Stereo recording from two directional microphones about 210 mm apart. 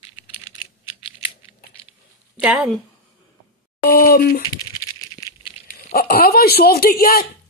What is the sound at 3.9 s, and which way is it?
Speech, 45° left (ahead or behind).